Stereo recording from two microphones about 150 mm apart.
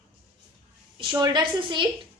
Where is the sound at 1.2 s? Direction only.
30° right (ahead or behind).